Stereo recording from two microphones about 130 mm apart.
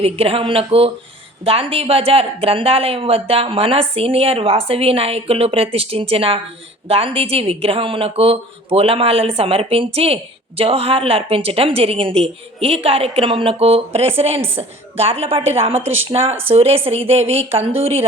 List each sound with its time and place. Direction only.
0.0 s speech: 45° right (ahead or behind)